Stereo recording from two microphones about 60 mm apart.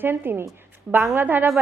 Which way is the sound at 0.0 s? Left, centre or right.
Right.